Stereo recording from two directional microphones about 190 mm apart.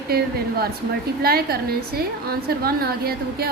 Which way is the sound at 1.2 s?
55° right (ahead or behind).